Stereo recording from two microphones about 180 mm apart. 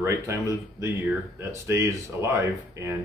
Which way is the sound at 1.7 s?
15° right (ahead or behind).